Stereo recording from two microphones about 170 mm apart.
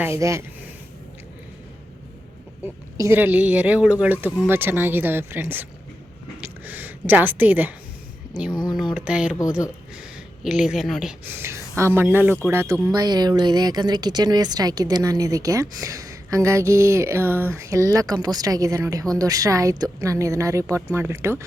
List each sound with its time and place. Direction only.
0.0 s speech: 15° right (ahead or behind)
3.0 s speech: 15° right (ahead or behind)
6.4 s a sound: 10° right (ahead or behind)
8.4 s speech: 25° left (ahead or behind)
9.0 s speech: 5° right (ahead or behind)
11.3 s speech: 15° right (ahead or behind)